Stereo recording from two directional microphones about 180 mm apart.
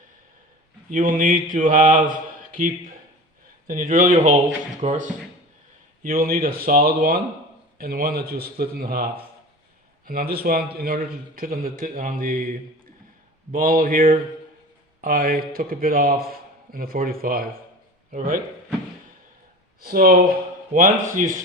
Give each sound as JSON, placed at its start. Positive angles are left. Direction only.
{"t": 0.9, "sound": "a man's voice", "side_deg": -50}
{"t": 6.0, "sound": "a man's voice", "side_deg": -50}
{"t": 10.1, "sound": "a man's voice", "side_deg": -55}
{"t": 19.8, "sound": "a man's voice", "side_deg": -55}